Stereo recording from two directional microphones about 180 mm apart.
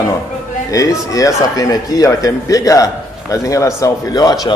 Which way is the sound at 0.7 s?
20° left (ahead or behind).